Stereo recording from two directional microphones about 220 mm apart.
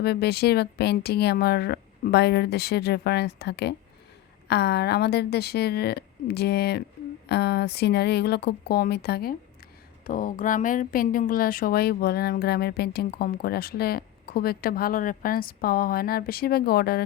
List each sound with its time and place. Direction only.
0.0 s speech: 45° left (ahead or behind)